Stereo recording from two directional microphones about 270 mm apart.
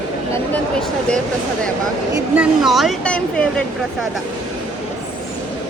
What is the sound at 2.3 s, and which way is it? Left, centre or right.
Speech, centre.